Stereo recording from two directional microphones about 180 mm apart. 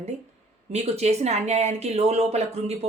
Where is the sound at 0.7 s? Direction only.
35° right (ahead or behind).